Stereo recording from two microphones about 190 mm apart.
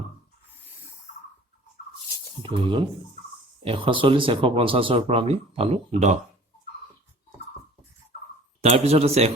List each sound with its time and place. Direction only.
2.4 s speech: 25° right (ahead or behind)
8.6 s speech: 35° right (ahead or behind)